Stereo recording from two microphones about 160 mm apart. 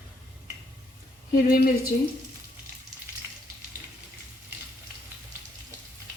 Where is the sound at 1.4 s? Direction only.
65° left (ahead or behind).